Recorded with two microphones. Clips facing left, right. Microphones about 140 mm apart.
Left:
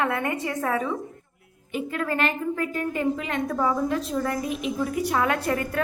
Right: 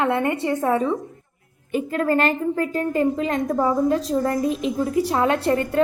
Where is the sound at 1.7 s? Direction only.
40° right (ahead or behind).